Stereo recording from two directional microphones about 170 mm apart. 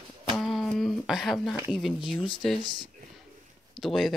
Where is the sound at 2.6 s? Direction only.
25° right (ahead or behind).